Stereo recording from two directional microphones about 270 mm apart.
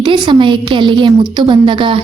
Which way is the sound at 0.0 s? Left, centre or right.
Centre.